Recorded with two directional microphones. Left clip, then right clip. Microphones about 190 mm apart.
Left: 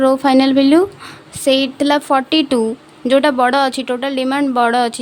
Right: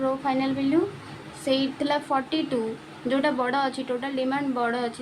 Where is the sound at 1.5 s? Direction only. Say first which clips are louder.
Left 11 dB; 55° left (ahead or behind).